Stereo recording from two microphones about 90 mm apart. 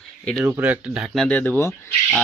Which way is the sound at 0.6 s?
15° right (ahead or behind).